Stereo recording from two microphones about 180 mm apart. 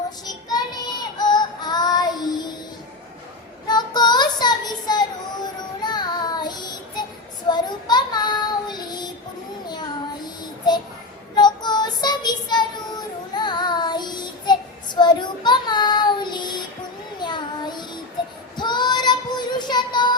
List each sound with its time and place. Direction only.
0.3 s child singing: 20° left (ahead or behind)
3.7 s child singing: 25° left (ahead or behind)
11.3 s child singing: 25° left (ahead or behind)